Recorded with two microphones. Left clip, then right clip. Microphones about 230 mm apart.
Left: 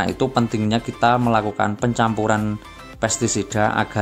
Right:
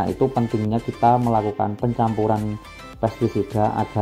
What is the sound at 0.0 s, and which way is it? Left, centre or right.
Speech, left.